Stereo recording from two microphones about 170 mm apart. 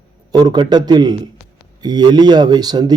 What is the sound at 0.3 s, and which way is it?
A man's voice, 25° right (ahead or behind).